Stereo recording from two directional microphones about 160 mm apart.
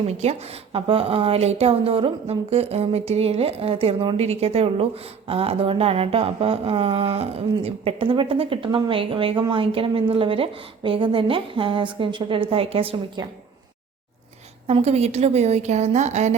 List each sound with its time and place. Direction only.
0.1 s a woman's voice: 40° right (ahead or behind)
14.7 s a woman's voice: 40° right (ahead or behind)